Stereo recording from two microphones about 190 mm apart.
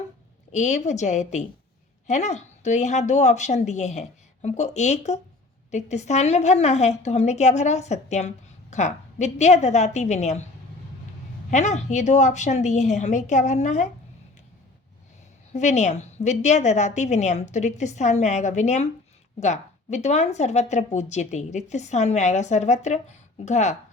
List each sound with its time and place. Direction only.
0.5 s a woman's voice: 40° left (ahead or behind)
11.5 s a woman's voice: 40° left (ahead or behind)
15.5 s a woman's voice: 35° left (ahead or behind)